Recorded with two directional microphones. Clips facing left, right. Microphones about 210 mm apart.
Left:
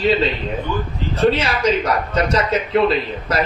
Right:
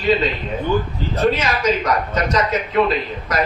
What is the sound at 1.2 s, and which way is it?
Speech, 30° left (ahead or behind).